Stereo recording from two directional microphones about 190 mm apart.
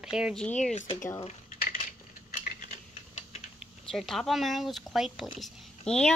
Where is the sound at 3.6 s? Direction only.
Centre (ahead or behind).